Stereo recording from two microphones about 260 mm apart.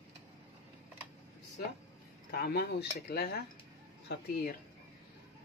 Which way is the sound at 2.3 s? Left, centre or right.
Left.